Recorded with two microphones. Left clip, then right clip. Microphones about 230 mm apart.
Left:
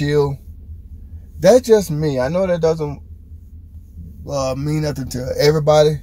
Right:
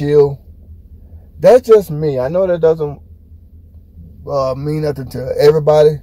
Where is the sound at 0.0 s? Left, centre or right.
Centre.